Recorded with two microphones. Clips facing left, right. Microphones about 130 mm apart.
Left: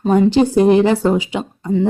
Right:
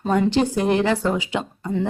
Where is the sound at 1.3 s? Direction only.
15° left (ahead or behind).